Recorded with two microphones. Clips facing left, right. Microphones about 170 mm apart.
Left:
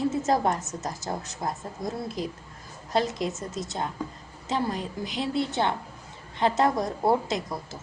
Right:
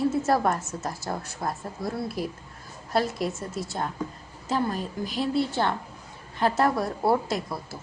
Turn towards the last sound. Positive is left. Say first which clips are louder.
# even
turn(degrees=20)  # may be behind; listen again after turning